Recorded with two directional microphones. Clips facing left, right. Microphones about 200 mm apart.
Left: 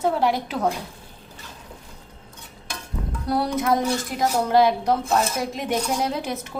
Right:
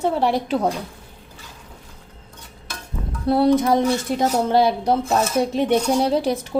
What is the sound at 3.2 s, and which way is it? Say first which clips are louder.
A woman's voice: right 7 dB; 25° right (ahead or behind).